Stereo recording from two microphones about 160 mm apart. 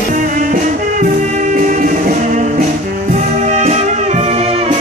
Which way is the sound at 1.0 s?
50° right (ahead or behind).